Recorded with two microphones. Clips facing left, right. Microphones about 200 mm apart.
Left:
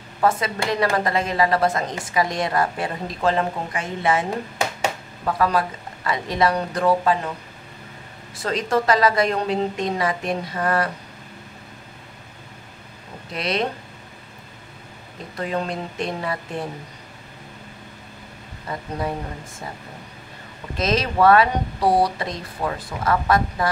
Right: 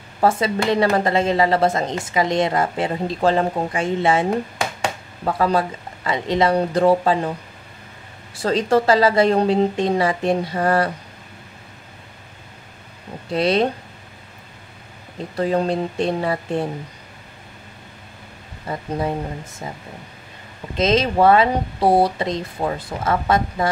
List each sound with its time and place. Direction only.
0.2 s speech: 25° right (ahead or behind)
3.2 s speech: 35° right (ahead or behind)
5.2 s speech: 25° right (ahead or behind)
8.4 s a woman's voice: 30° right (ahead or behind)
13.3 s a woman's voice: 30° right (ahead or behind)
15.3 s a woman's voice: 35° right (ahead or behind)
18.7 s speech: 25° right (ahead or behind)
20.7 s speech: 25° right (ahead or behind)